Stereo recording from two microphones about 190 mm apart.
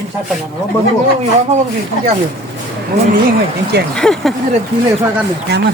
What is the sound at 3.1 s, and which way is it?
Speech, 50° right (ahead or behind).